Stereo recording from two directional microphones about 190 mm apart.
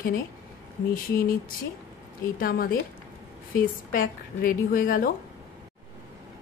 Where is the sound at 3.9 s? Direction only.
45° left (ahead or behind).